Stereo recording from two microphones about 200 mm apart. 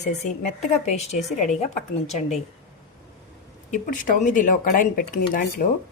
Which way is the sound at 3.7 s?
40° left (ahead or behind).